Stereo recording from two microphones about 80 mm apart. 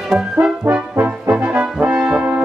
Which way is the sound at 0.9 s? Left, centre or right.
Centre.